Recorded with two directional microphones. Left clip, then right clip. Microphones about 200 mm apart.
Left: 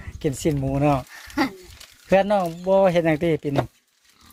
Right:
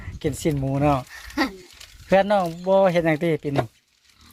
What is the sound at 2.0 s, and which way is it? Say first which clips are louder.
Speech: even; centre (ahead or behind).